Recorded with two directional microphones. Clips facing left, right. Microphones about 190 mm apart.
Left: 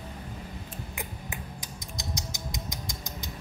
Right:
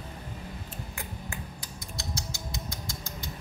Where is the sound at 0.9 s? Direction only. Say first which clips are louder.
Left 1 dB; 20° left (ahead or behind).